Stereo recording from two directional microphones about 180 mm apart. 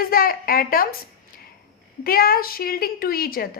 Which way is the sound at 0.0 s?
55° left (ahead or behind).